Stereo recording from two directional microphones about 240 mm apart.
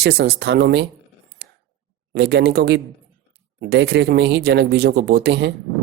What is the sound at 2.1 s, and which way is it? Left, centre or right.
Speech, right.